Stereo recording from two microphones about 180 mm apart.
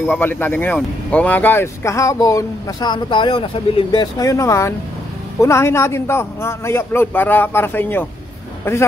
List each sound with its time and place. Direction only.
0.0 s speech: 10° left (ahead or behind)